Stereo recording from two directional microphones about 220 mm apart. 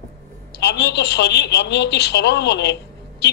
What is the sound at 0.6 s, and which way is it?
A man's voice, 50° left (ahead or behind).